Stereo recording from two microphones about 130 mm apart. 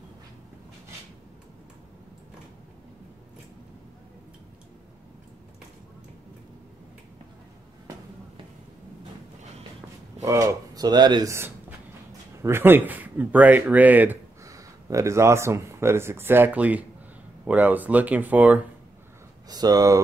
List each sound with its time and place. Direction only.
10.2 s speech: 25° right (ahead or behind)
12.4 s speech: 15° right (ahead or behind)
14.4 s speech: 25° right (ahead or behind)
19.5 s speech: 30° right (ahead or behind)